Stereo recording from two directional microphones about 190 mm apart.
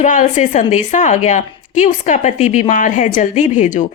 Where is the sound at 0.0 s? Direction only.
40° left (ahead or behind).